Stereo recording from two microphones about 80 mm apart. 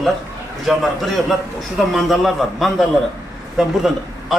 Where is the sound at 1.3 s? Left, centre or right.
Centre.